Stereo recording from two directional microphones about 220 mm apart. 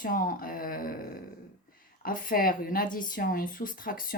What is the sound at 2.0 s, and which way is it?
Speech, 40° left (ahead or behind).